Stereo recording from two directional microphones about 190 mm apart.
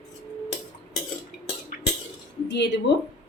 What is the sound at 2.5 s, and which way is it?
Speech, 65° left (ahead or behind).